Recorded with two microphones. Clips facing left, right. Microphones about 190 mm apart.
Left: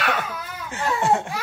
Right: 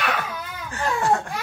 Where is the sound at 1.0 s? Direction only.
25° left (ahead or behind).